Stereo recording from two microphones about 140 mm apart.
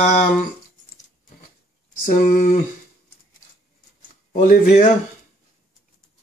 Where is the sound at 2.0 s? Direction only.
65° left (ahead or behind).